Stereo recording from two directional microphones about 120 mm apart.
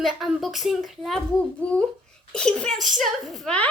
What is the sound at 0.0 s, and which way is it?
A woman's voice, centre (ahead or behind).